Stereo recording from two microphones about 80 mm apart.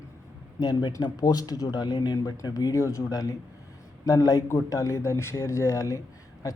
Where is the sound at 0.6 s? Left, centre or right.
Left.